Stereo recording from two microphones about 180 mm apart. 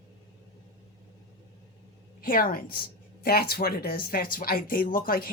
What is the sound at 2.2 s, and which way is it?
Speech, 50° left (ahead or behind).